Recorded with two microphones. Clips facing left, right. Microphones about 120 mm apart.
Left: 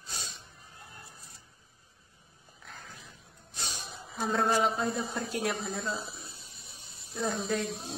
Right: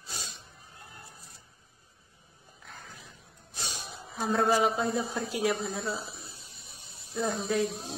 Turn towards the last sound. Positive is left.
turn(degrees=0)  # may be behind; listen again after turning